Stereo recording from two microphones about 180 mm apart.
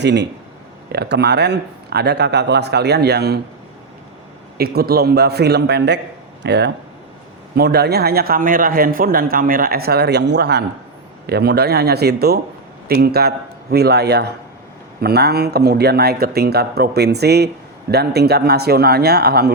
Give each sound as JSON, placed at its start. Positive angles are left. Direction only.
{"t": 0.0, "sound": "speech", "side_deg": -70}
{"t": 4.5, "sound": "a man's voice", "side_deg": -60}